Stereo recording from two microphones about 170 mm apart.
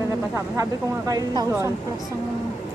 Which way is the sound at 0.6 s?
20° right (ahead or behind).